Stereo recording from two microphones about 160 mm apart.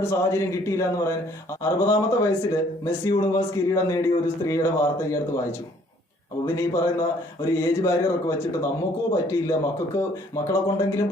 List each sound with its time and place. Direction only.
0.0 s speech: 15° left (ahead or behind)